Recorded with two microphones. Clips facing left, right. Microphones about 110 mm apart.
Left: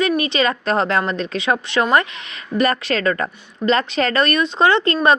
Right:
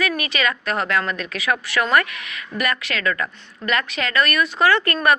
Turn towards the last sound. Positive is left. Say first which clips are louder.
# left 3 dB
turn(degrees=25)  # may be behind; listen again after turning